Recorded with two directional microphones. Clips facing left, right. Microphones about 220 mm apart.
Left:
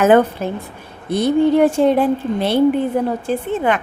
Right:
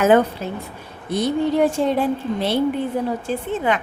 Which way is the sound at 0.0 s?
55° left (ahead or behind).